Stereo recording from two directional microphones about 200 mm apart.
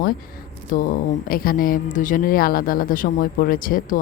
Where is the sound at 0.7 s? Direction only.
45° left (ahead or behind).